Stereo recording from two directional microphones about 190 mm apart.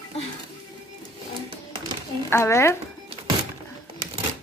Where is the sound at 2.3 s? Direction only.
15° left (ahead or behind).